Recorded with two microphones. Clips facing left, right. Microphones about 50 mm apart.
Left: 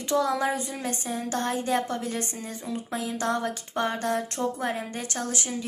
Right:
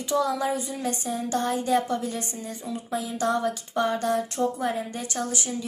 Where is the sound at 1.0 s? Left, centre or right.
Left.